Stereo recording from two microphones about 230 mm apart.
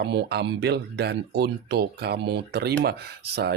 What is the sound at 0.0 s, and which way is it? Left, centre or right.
Speech, right.